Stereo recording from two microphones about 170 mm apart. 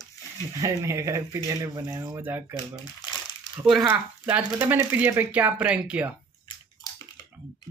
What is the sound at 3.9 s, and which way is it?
Speech, 10° right (ahead or behind).